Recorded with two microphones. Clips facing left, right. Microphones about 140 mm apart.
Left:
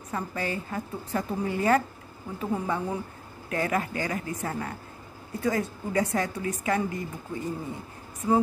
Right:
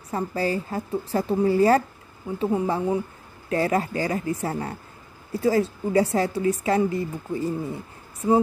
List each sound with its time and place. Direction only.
0.1 s a woman's voice: 35° right (ahead or behind)
3.4 s a woman's voice: 35° right (ahead or behind)